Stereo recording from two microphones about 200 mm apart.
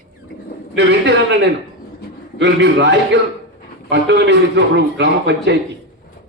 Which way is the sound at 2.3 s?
60° right (ahead or behind).